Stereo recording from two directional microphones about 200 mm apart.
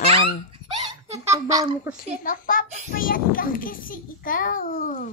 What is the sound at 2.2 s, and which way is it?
A child's voice, 40° left (ahead or behind).